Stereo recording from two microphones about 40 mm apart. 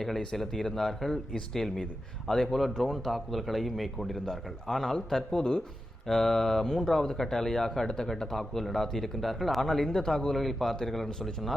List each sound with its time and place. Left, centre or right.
0.3 s a man's voice: centre
5.4 s speech: left
6.1 s a man's voice: centre